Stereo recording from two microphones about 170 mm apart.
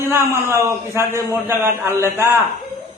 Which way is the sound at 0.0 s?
15° right (ahead or behind).